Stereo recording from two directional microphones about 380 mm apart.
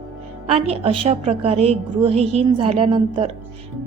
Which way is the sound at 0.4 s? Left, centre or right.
Centre.